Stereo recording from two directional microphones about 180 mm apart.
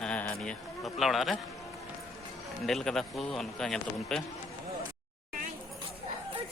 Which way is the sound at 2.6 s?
Centre (ahead or behind).